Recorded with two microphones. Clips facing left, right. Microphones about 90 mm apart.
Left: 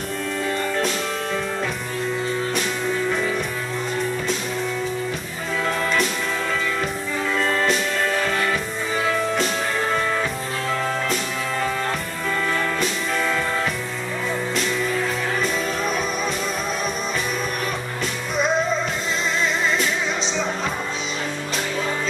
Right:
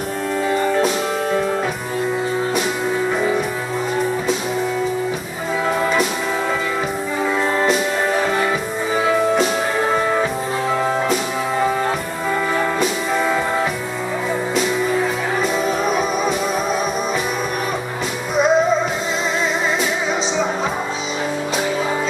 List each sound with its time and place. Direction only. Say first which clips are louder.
0.5 s music: right 7 dB; 20° right (ahead or behind)
3.1 s music: right 4 dB; 20° right (ahead or behind)
5.7 s music: right 4 dB; 10° right (ahead or behind)
7.3 s music: right 3 dB; 15° right (ahead or behind)
12.5 s music: right 4 dB; 15° right (ahead or behind)
14.5 s music: right 6 dB; 5° right (ahead or behind)
18.3 s music: right 6 dB; 5° right (ahead or behind)